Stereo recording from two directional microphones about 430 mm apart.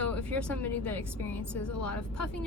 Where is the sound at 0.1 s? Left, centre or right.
Centre.